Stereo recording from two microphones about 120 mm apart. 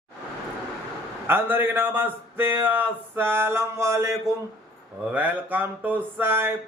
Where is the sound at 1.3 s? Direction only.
20° right (ahead or behind).